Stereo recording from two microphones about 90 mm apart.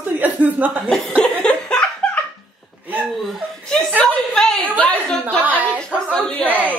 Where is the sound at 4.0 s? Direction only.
10° left (ahead or behind).